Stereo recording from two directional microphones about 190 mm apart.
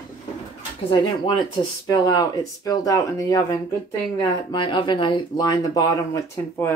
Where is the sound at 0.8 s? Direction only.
25° left (ahead or behind).